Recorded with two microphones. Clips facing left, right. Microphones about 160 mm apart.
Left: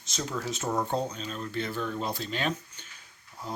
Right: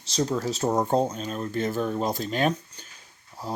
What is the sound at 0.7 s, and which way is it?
Speech, 45° right (ahead or behind).